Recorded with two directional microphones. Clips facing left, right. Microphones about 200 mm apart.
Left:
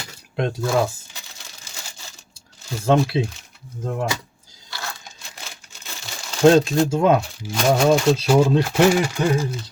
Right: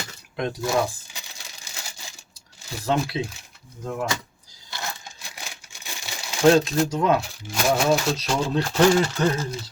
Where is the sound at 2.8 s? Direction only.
25° left (ahead or behind).